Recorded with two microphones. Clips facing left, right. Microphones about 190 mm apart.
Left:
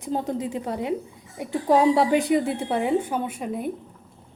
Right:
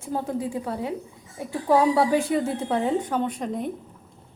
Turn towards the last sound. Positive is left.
turn(degrees=5)  # may be behind; listen again after turning